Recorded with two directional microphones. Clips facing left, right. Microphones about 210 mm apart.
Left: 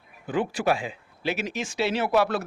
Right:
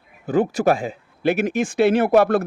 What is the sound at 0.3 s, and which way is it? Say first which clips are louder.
A man's voice: right 7 dB; 40° right (ahead or behind).